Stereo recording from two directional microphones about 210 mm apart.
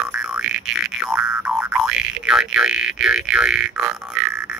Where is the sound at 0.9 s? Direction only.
10° right (ahead or behind).